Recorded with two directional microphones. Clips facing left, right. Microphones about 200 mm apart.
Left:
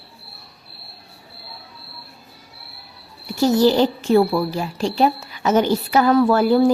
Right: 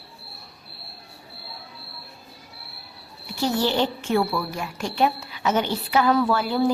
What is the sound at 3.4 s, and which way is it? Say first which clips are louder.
A woman's voice: left 7 dB; 40° left (ahead or behind).